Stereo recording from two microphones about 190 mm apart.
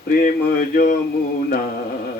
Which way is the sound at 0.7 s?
45° left (ahead or behind).